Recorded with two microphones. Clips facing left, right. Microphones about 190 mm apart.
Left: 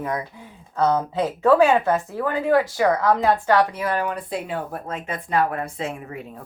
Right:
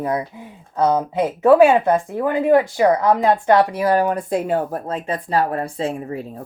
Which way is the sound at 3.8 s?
40° right (ahead or behind).